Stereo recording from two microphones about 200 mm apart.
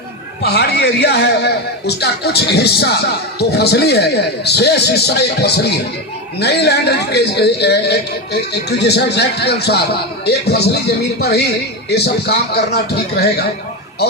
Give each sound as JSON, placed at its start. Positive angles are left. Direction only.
{"t": 0.4, "sound": "a man's voice", "side_deg": 55}